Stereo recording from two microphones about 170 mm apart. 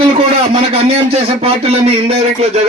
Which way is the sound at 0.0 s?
30° right (ahead or behind).